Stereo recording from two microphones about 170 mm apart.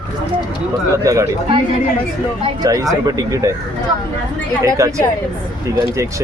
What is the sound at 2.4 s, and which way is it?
Speech, 20° right (ahead or behind).